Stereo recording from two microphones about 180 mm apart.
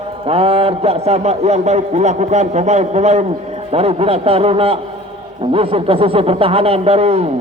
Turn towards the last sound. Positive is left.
turn(degrees=-35)  # may be behind; listen again after turning